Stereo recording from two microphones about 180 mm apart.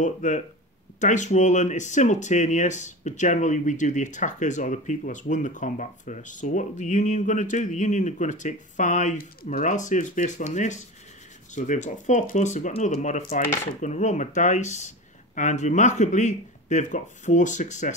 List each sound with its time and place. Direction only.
0.0 s speech: 45° left (ahead or behind)